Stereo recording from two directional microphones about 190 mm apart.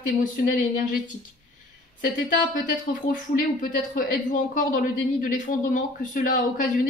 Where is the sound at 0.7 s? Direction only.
45° left (ahead or behind).